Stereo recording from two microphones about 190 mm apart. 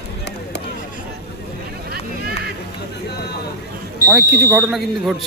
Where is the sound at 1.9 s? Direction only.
55° right (ahead or behind).